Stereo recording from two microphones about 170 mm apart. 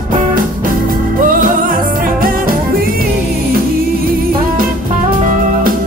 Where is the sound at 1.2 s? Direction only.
55° right (ahead or behind).